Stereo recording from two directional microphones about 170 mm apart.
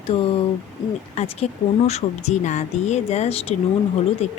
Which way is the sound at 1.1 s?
40° left (ahead or behind).